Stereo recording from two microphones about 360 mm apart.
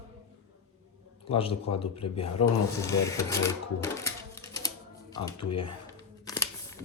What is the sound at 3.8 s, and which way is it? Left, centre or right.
Typewriter, centre.